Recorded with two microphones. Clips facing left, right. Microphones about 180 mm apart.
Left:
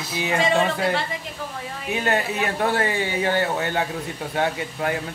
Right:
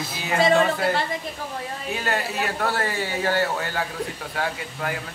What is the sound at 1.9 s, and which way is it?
Speech, 20° left (ahead or behind).